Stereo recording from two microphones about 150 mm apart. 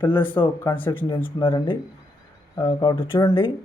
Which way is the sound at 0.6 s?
15° left (ahead or behind).